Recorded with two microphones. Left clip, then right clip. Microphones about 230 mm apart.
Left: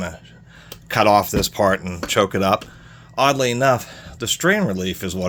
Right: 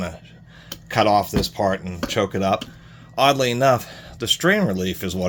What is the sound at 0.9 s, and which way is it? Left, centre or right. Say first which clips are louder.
Speech: left 2 dB; left.